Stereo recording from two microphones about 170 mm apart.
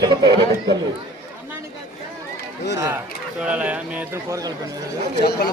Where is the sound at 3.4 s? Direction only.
5° right (ahead or behind).